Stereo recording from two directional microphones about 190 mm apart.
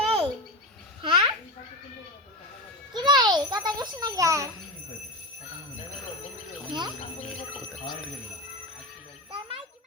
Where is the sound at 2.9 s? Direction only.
20° right (ahead or behind).